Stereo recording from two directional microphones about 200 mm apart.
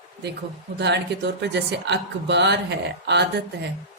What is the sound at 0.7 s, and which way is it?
Speech, 60° right (ahead or behind).